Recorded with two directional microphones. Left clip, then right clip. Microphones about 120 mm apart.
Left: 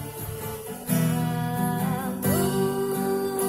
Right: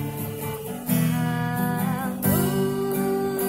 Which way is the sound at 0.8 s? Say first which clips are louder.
Right 1 dB; 35° right (ahead or behind).